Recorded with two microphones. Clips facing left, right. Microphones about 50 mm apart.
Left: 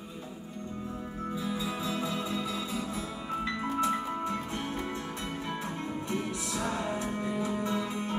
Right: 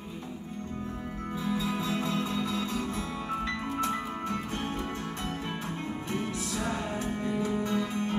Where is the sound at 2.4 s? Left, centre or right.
Centre.